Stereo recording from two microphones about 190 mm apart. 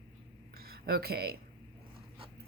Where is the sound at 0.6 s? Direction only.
50° right (ahead or behind).